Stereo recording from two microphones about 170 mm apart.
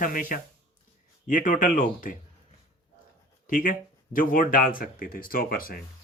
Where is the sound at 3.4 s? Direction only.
50° left (ahead or behind).